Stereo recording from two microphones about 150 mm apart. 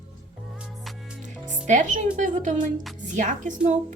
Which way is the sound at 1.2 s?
55° right (ahead or behind).